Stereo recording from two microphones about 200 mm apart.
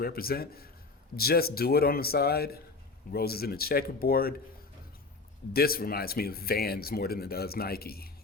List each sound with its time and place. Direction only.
0.0 s speech: 50° left (ahead or behind)
5.5 s speech: 50° left (ahead or behind)